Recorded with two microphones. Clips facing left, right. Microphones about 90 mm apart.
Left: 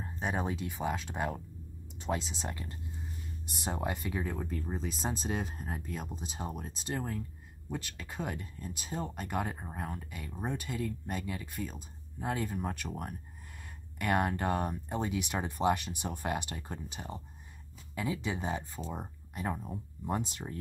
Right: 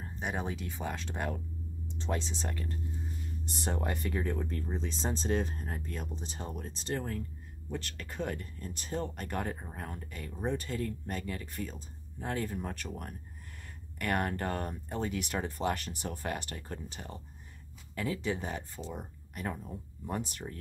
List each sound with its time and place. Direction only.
0.2 s speech: centre (ahead or behind); by 20.5 s 20° left (ahead or behind)